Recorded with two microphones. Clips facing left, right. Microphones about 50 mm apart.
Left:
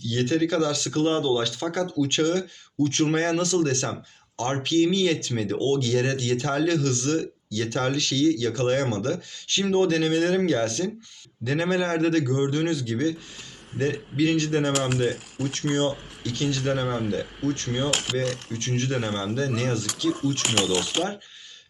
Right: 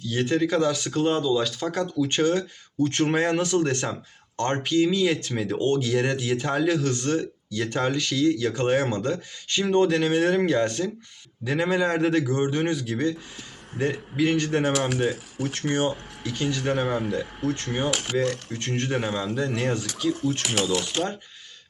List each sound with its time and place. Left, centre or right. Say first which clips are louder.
0.0 s speech: even; centre
2.0 s speech: right 1 dB; centre
16.7 s speech: right 2 dB; right
17.1 s speech: even; centre
18.8 s speech: right 1 dB; centre
20.4 s speech: left 1 dB; left